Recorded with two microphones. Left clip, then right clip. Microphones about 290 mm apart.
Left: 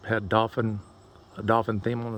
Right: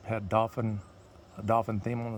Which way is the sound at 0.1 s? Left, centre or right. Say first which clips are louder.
Left 4 dB; centre.